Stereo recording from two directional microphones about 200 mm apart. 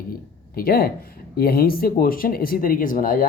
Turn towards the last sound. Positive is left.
turn(degrees=45)  # may be behind; listen again after turning